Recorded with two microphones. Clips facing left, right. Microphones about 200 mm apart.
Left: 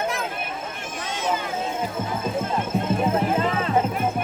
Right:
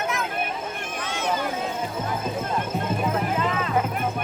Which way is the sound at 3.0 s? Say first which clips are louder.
Left 2 dB; 25° left (ahead or behind).